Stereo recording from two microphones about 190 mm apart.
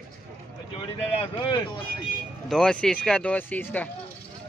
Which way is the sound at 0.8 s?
25° left (ahead or behind).